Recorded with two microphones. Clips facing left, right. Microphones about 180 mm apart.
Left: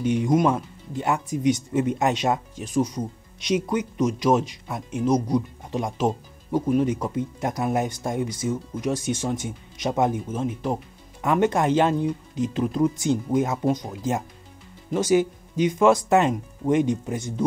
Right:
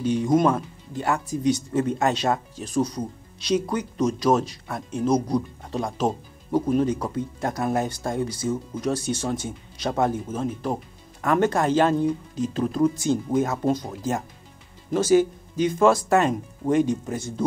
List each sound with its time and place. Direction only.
0.0 s speech: 20° left (ahead or behind)
15.0 s speech: 20° left (ahead or behind)